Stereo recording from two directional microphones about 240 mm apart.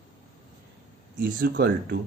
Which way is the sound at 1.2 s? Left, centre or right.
Right.